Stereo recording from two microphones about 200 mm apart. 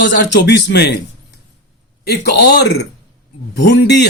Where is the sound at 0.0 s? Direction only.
60° left (ahead or behind).